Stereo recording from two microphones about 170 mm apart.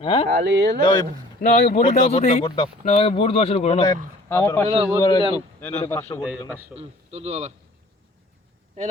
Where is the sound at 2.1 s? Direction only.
40° left (ahead or behind).